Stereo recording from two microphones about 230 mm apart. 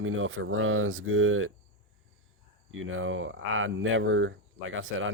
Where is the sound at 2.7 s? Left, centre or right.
Right.